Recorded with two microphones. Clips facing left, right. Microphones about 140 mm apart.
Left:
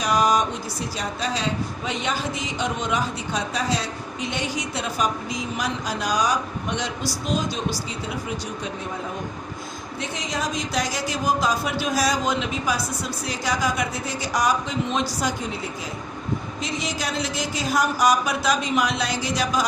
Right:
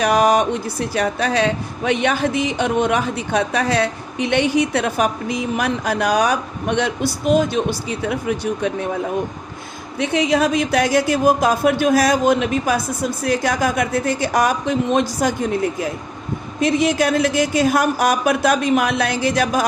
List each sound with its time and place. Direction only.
0.0 s speech: 60° right (ahead or behind)
10.0 s speech: 65° right (ahead or behind)